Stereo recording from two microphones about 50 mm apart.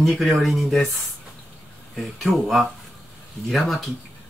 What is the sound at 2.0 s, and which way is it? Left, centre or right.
Speech, centre.